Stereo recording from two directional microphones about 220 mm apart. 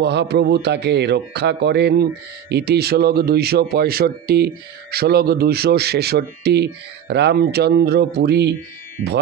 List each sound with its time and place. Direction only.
0.0 s speech: 50° right (ahead or behind)